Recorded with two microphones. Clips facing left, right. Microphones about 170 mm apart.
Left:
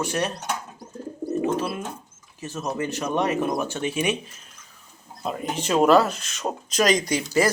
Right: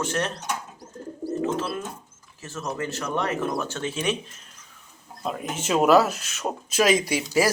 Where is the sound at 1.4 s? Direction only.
15° left (ahead or behind).